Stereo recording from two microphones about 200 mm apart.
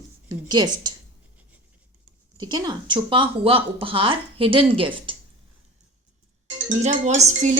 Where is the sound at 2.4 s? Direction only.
20° right (ahead or behind).